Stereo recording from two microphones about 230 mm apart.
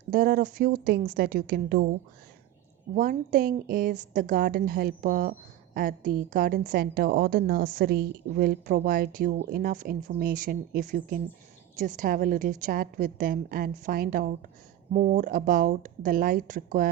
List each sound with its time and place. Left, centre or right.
0.1 s a woman's voice: right